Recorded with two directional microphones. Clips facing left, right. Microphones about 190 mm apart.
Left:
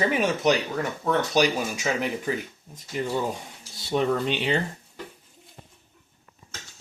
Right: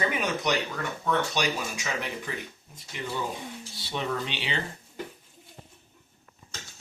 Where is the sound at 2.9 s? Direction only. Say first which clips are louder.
Left 6 dB; 40° left (ahead or behind).